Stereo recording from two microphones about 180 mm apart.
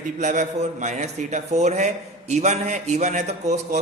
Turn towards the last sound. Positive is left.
turn(degrees=-40)  # may be behind; listen again after turning